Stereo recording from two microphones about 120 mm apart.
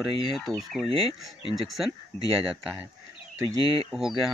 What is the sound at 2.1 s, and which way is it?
Speech, 70° right (ahead or behind).